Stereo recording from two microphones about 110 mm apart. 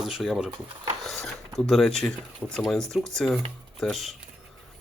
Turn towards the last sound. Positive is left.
turn(degrees=0)  # may be behind; listen again after turning